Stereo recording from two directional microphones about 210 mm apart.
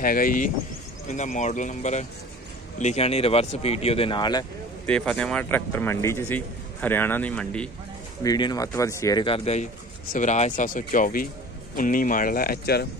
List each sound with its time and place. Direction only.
0.0 s speech: 40° left (ahead or behind); by 4.5 s 20° left (ahead or behind)
4.8 s speech: 5° left (ahead or behind)
8.2 s speech: 20° left (ahead or behind); by 12.8 s 45° left (ahead or behind)